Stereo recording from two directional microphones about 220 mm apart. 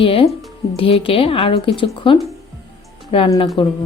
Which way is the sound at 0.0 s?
25° left (ahead or behind).